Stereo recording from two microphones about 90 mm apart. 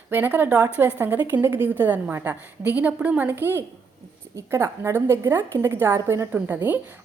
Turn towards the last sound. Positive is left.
turn(degrees=-20)  # may be behind; listen again after turning